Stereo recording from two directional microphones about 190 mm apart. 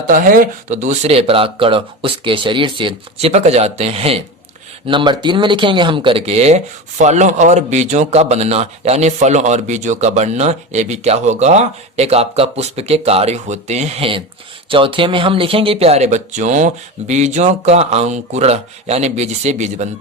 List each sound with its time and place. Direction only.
0.1 s a man's voice: 45° right (ahead or behind)